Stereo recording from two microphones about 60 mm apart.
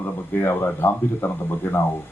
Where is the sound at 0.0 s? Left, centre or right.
Left.